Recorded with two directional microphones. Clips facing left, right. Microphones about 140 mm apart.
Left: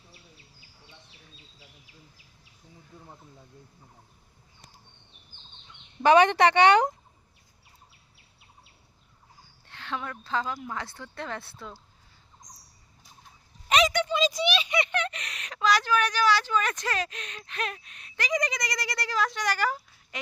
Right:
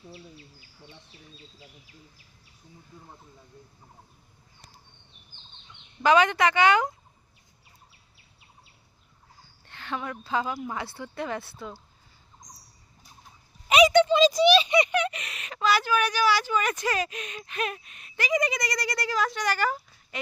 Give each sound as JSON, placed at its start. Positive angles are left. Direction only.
{"t": 6.0, "sound": "a woman's voice", "side_deg": 30}
{"t": 9.6, "sound": "speech", "side_deg": 0}
{"t": 13.7, "sound": "a sound", "side_deg": -10}
{"t": 13.9, "sound": "a child's voice", "side_deg": -30}
{"t": 14.7, "sound": "speech", "side_deg": -15}